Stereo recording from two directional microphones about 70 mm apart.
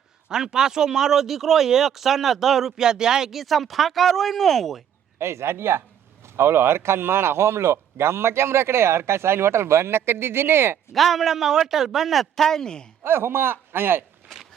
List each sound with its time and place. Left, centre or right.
0.3 s speech: centre
5.2 s a man's voice: right
10.9 s speech: centre
13.0 s a man's voice: right